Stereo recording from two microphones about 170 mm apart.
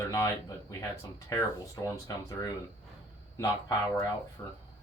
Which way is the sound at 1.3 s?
20° left (ahead or behind).